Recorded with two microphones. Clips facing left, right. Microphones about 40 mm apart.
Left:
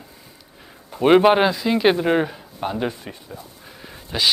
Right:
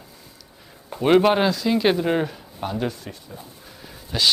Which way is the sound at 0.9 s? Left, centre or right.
Centre.